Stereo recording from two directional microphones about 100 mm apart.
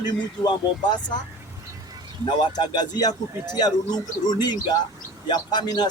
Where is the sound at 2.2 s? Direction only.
45° left (ahead or behind).